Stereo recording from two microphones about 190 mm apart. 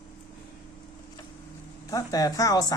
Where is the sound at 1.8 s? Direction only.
20° left (ahead or behind).